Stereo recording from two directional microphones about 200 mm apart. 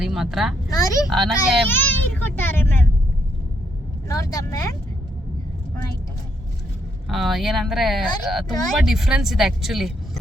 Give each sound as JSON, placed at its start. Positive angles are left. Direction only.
{"t": 0.0, "sound": "speech", "side_deg": 0}
{"t": 0.7, "sound": "speech", "side_deg": 15}
{"t": 1.1, "sound": "speech", "side_deg": 0}
{"t": 1.6, "sound": "a child's voice", "side_deg": 10}
{"t": 4.1, "sound": "speech", "side_deg": 15}
{"t": 7.1, "sound": "speech", "side_deg": 0}